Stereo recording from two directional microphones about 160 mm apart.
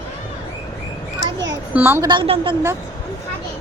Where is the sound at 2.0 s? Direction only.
30° right (ahead or behind).